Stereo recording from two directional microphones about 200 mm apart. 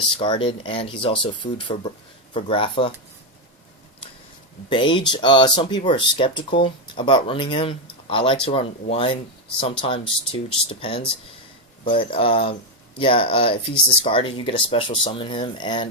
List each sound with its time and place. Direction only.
0.2 s speech: 25° left (ahead or behind)
4.7 s speech: 25° left (ahead or behind)